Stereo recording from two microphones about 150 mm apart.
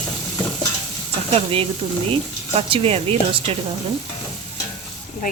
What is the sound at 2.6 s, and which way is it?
Speech, 40° right (ahead or behind).